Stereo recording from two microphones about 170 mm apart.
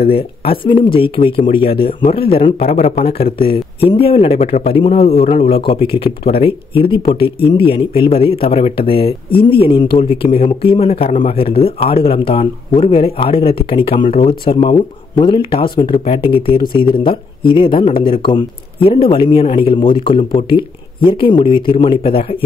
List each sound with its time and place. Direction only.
0.1 s a man's voice: 30° left (ahead or behind)